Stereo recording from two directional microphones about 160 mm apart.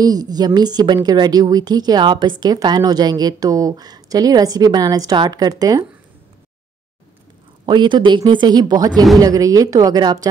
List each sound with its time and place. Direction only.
0.0 s a woman's voice: 25° right (ahead or behind)
7.6 s a woman's voice: 30° right (ahead or behind)